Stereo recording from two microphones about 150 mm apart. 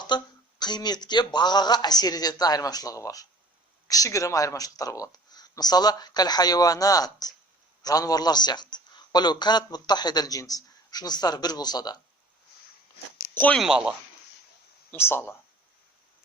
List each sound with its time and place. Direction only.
0.1 s speech: 30° left (ahead or behind)
13.3 s speech: 10° left (ahead or behind)
13.6 s speech: 5° right (ahead or behind)
14.8 s speech: 15° left (ahead or behind)